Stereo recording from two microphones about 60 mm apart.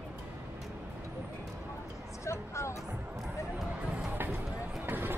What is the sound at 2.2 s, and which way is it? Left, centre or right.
Music, left.